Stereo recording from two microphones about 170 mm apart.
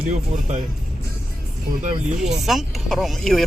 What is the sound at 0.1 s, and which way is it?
Speech, 45° right (ahead or behind).